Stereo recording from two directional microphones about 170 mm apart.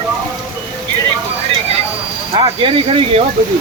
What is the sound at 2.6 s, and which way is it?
Speech, 30° right (ahead or behind).